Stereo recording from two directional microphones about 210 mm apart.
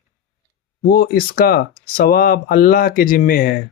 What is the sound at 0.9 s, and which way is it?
Speech, 45° left (ahead or behind).